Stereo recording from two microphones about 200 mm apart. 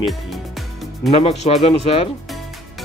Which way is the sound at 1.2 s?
30° left (ahead or behind).